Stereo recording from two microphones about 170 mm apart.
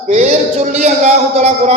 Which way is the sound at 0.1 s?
40° right (ahead or behind).